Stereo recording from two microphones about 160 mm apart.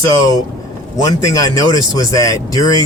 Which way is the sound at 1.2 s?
20° left (ahead or behind).